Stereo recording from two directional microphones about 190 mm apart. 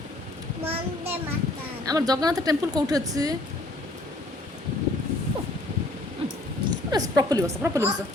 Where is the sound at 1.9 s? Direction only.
20° right (ahead or behind).